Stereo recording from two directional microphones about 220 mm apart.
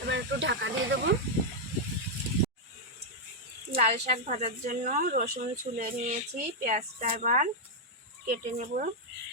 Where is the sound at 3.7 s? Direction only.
35° right (ahead or behind).